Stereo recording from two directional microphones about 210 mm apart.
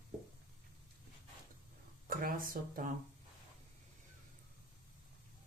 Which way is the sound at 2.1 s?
45° right (ahead or behind).